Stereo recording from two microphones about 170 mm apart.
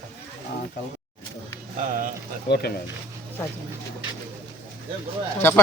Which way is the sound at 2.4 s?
70° left (ahead or behind).